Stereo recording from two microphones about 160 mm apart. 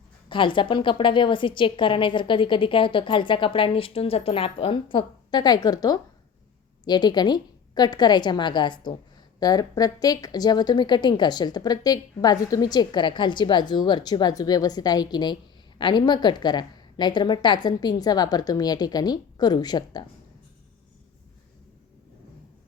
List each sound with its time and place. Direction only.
0.3 s a woman's voice: 30° left (ahead or behind)